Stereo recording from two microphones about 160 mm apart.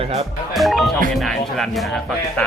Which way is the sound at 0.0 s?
40° right (ahead or behind).